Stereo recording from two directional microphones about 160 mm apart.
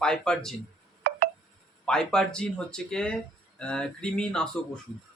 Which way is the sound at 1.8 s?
5° left (ahead or behind).